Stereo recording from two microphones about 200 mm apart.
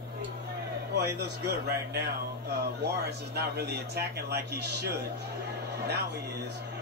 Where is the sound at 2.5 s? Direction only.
55° right (ahead or behind).